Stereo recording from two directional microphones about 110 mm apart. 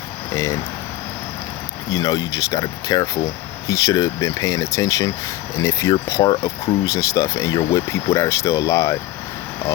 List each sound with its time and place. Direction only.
1.9 s speech: 35° left (ahead or behind)